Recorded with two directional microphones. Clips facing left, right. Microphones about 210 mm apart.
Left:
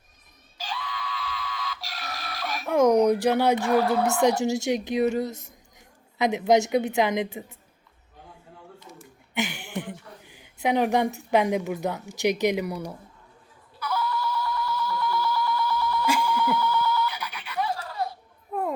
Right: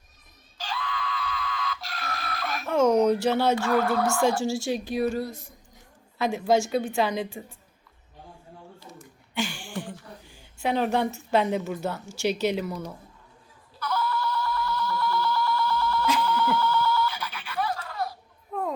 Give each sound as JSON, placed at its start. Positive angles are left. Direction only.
{"t": 0.6, "sound": "screaming", "side_deg": 10}
{"t": 2.6, "sound": "speech", "side_deg": 15}
{"t": 9.3, "sound": "speech", "side_deg": 20}
{"t": 13.7, "sound": "a sound", "side_deg": 10}
{"t": 15.4, "sound": "goat", "side_deg": 15}